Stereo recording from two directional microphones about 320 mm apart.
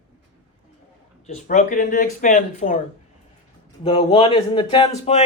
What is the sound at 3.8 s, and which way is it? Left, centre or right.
Speech, centre.